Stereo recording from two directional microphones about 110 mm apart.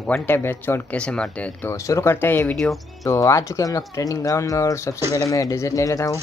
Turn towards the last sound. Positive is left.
turn(degrees=30)  # may be behind; listen again after turning